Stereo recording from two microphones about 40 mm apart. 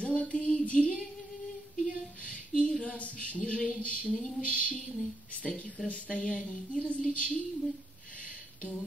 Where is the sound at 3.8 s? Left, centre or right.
Left.